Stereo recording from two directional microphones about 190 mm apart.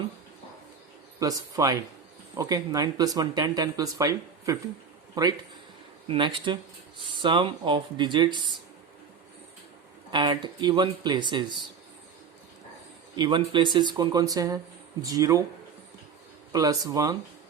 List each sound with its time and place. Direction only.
1.2 s speech: 20° right (ahead or behind)
6.1 s speech: 25° right (ahead or behind)
10.1 s speech: 25° right (ahead or behind)
13.1 s speech: 25° right (ahead or behind)
16.5 s speech: 20° right (ahead or behind)